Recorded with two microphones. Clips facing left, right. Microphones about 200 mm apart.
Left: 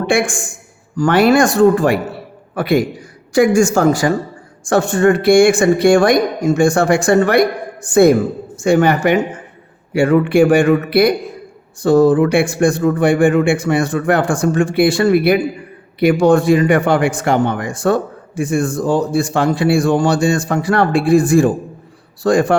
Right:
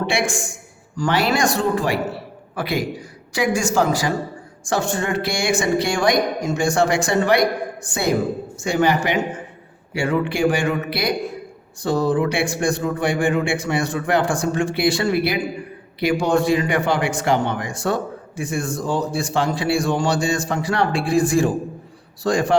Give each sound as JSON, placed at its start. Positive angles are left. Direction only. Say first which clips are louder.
{"t": 0.1, "sound": "a man's voice", "louder": "left 6 dB", "side_deg": 50}
{"t": 8.6, "sound": "a man's voice", "louder": "left 7 dB", "side_deg": 55}